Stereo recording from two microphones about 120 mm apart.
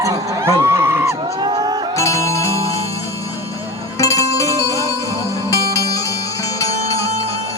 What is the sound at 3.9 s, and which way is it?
Music, 25° left (ahead or behind).